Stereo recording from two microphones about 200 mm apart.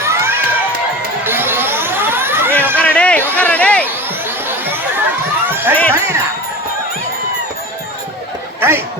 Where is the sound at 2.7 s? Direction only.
5° left (ahead or behind).